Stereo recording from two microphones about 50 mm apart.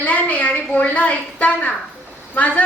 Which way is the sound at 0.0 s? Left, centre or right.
Left.